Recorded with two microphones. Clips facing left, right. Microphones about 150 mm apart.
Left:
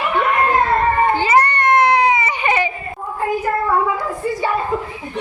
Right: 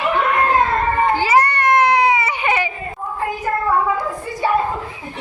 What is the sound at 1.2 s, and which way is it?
Baby cry, 10° right (ahead or behind).